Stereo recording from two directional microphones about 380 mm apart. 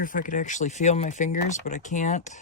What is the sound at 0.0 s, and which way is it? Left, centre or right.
Speech, left.